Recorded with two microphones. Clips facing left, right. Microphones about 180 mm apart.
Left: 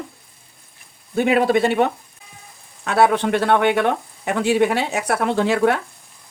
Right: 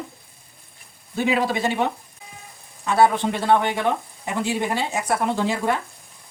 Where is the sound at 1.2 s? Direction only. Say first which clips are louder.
Left 6 dB; 60° left (ahead or behind).